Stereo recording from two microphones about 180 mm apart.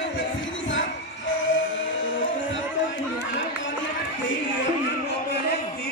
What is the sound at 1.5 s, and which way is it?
Music, 90° left.